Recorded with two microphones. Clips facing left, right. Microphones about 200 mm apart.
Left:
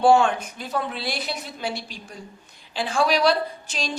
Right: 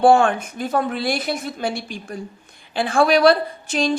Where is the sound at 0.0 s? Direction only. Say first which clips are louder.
Right 3 dB; 55° right (ahead or behind).